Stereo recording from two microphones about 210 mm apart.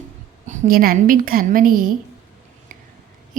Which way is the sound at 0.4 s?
40° right (ahead or behind).